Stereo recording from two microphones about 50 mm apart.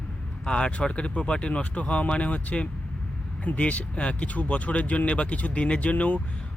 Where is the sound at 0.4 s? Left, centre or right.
Centre.